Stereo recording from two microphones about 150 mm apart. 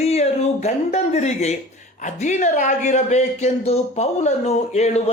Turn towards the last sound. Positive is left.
turn(degrees=45)  # may be behind; listen again after turning